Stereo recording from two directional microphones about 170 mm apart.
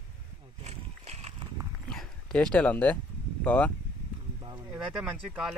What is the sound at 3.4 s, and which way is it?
Speech, 10° left (ahead or behind).